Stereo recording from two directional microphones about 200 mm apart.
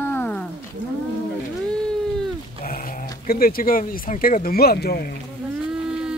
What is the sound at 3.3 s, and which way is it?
Speech, 45° left (ahead or behind).